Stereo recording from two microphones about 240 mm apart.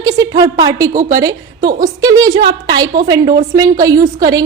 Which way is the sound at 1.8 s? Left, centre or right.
Centre.